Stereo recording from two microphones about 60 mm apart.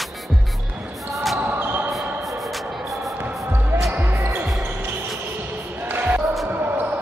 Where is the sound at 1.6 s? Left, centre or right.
Right.